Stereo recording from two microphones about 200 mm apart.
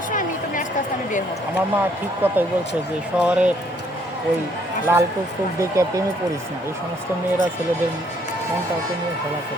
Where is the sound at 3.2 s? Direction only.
5° right (ahead or behind).